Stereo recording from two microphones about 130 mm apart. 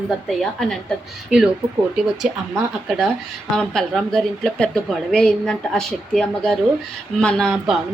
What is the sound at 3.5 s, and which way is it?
Speech, 5° left (ahead or behind).